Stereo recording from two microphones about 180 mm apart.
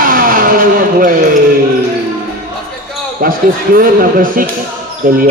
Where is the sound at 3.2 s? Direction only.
50° right (ahead or behind).